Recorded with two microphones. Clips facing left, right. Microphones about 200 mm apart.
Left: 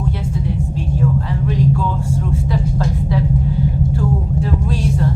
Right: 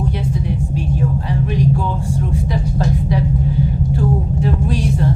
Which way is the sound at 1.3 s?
15° right (ahead or behind).